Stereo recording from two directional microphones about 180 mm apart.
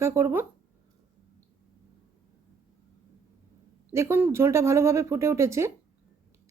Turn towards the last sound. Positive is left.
turn(degrees=-15)  # may be behind; listen again after turning